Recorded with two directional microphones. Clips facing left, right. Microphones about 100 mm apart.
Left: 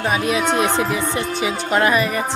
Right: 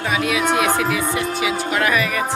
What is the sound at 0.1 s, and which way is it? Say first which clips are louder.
Speech: right 1 dB; 30° left (ahead or behind).